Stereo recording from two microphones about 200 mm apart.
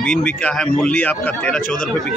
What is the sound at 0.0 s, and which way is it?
Speech, 5° left (ahead or behind).